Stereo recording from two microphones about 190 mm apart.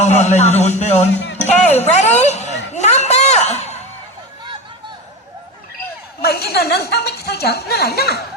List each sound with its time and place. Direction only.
0.0 s a man's voice: 35° left (ahead or behind)
1.1 s speech: 65° left (ahead or behind)
1.5 s a man's voice: 35° left (ahead or behind)
2.7 s a sound: 35° left (ahead or behind)
6.2 s a woman's voice: 55° left (ahead or behind)